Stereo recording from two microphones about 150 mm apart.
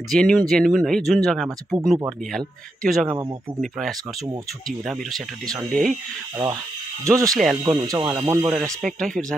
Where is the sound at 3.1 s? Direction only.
30° right (ahead or behind).